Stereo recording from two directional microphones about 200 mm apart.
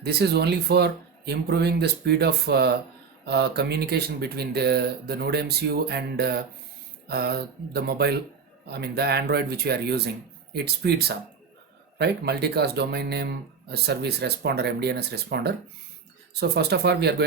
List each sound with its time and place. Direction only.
0.0 s speech: 55° right (ahead or behind)